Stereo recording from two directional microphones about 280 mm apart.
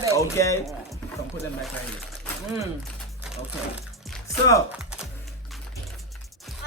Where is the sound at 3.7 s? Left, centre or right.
Centre.